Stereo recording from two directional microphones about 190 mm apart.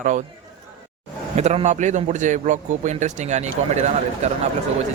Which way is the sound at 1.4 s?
35° right (ahead or behind).